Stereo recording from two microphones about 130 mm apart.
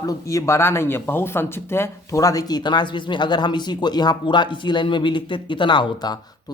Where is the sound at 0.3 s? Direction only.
25° left (ahead or behind).